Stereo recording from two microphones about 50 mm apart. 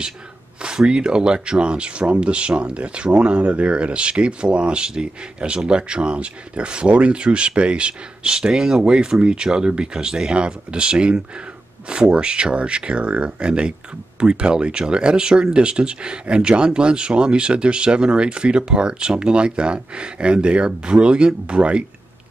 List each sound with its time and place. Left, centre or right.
0.6 s speech: centre